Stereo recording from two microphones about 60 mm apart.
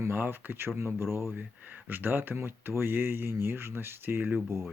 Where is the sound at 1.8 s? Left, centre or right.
Right.